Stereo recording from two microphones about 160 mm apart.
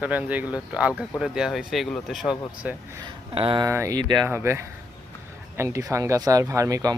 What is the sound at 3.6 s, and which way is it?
Speech, 20° right (ahead or behind).